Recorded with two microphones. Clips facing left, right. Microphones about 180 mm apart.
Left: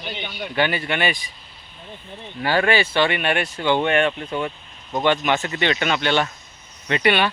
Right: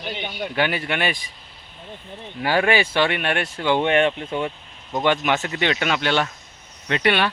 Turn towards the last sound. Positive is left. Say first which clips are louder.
# left 1 dB
turn(degrees=5)  # may be behind; listen again after turning